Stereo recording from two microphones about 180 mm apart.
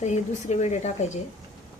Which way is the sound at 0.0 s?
40° left (ahead or behind).